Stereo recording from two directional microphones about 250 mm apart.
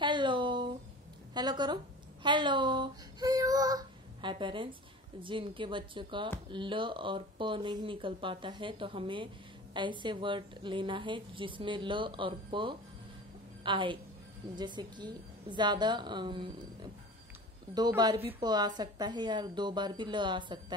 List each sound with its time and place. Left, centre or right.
0.0 s a sound: centre
1.3 s a woman's voice: centre
2.2 s child singing: centre
5.2 s a woman's voice: centre